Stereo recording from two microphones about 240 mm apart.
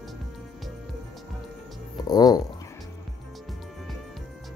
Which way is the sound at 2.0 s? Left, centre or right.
Centre.